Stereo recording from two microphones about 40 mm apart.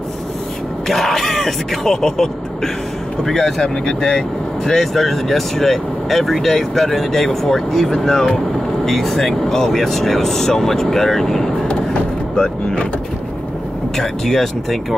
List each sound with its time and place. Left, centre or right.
0.8 s speech: centre; by 4.2 s left
4.6 s speech: centre
11.6 s vehicle: left
13.9 s speech: centre